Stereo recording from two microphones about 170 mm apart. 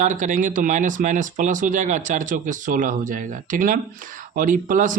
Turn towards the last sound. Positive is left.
turn(degrees=-50)  # may be behind; listen again after turning